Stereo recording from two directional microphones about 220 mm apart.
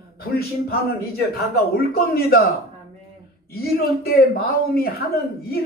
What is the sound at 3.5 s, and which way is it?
A man's voice, 45° left (ahead or behind).